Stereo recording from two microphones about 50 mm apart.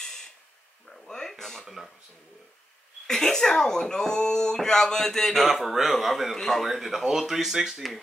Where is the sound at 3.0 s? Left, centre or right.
Centre.